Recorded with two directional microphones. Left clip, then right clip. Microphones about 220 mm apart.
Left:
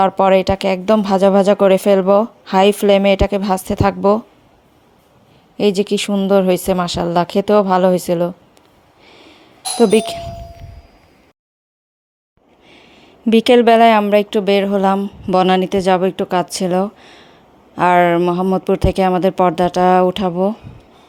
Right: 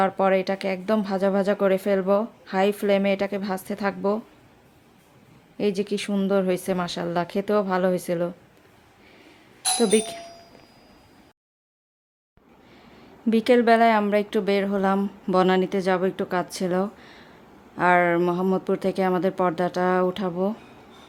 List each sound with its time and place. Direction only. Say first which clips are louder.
0.0 s speech: left 9 dB; 25° left (ahead or behind)
5.5 s speech: left 10 dB; 25° left (ahead or behind)
9.7 s speech: left 9 dB; 25° left (ahead or behind)
12.7 s speech: left 5 dB; 25° left (ahead or behind)